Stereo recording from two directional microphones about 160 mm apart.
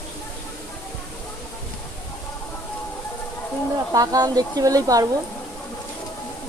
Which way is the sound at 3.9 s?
20° right (ahead or behind).